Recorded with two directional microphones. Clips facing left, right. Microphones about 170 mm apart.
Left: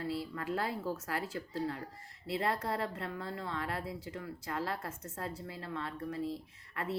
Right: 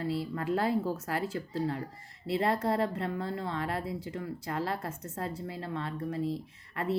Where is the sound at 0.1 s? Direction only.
25° right (ahead or behind).